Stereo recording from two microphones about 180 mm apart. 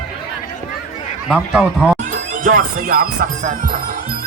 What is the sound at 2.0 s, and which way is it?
Speech, 50° right (ahead or behind).